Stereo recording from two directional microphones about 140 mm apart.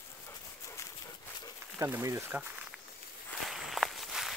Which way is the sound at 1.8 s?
20° right (ahead or behind).